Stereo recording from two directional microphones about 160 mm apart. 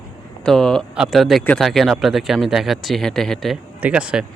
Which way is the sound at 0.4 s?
Centre (ahead or behind).